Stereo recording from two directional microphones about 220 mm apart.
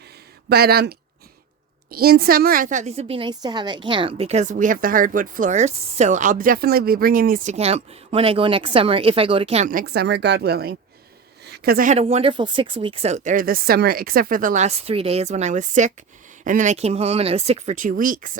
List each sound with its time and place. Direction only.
0.4 s a woman's voice: 45° right (ahead or behind); by 9.6 s 25° right (ahead or behind)
9.6 s a woman's voice: 45° right (ahead or behind)